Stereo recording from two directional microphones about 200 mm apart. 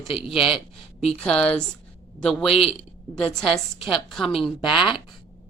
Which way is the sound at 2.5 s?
30° left (ahead or behind).